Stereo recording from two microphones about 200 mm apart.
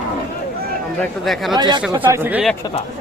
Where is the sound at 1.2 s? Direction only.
Centre (ahead or behind).